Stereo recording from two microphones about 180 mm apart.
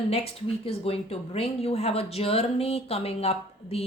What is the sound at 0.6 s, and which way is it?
A woman's voice, 35° left (ahead or behind).